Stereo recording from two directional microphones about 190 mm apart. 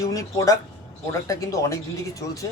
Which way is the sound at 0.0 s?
20° left (ahead or behind).